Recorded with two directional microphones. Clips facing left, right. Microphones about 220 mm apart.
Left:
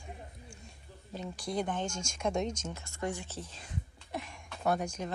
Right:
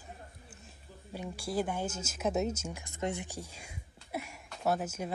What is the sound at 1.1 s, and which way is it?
Speech, 10° right (ahead or behind).